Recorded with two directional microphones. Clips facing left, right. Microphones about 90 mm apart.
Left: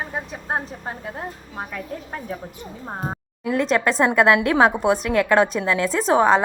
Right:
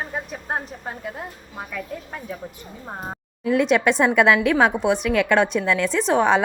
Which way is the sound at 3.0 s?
20° left (ahead or behind).